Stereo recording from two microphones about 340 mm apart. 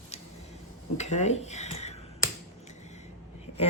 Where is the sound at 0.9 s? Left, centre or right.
Centre.